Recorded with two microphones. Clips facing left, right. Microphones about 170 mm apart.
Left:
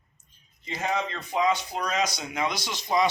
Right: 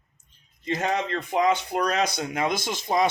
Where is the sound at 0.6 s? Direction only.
60° right (ahead or behind).